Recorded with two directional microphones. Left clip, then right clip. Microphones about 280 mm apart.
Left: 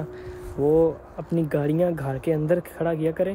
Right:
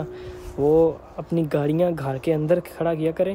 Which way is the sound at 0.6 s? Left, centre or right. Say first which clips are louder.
Right 2 dB; centre.